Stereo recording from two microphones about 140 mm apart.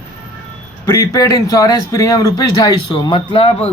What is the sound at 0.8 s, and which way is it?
Speech, 20° left (ahead or behind).